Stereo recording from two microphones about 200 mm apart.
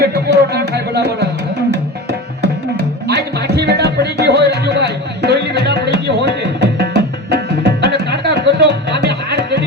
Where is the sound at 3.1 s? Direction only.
55° right (ahead or behind).